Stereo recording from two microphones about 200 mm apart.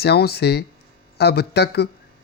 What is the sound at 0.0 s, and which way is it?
A woman's voice, 55° left (ahead or behind).